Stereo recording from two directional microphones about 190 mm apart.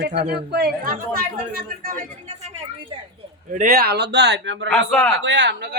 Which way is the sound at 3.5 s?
50° right (ahead or behind).